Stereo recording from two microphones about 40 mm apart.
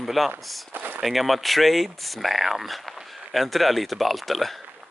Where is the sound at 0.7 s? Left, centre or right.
Right.